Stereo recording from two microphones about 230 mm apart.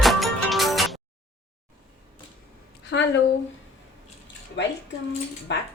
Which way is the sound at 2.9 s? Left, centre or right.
Left.